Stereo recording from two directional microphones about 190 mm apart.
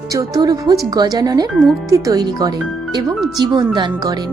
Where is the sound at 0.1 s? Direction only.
20° right (ahead or behind).